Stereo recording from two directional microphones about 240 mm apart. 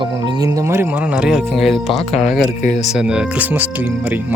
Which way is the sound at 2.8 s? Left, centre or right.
Centre.